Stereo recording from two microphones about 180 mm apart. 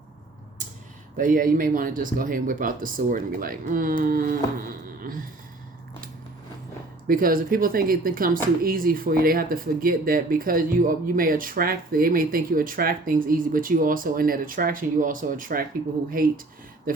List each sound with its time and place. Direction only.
1.1 s speech: 50° right (ahead or behind)
7.1 s speech: 50° right (ahead or behind)